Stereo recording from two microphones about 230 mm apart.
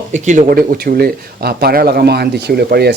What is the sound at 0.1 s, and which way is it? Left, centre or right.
Speech, right.